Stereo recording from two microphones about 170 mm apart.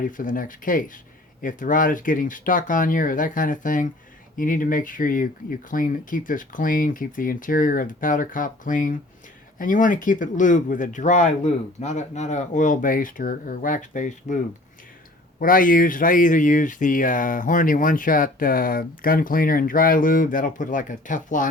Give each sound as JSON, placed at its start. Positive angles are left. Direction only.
{"t": 0.2, "sound": "speech", "side_deg": 50}
{"t": 15.4, "sound": "speech", "side_deg": 55}